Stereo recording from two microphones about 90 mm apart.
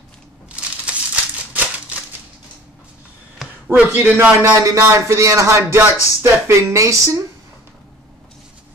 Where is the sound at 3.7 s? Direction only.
20° right (ahead or behind); by 7.2 s 35° right (ahead or behind).